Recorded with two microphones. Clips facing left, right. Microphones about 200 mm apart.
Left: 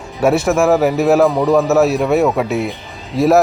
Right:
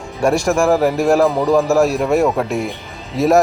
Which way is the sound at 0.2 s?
5° left (ahead or behind).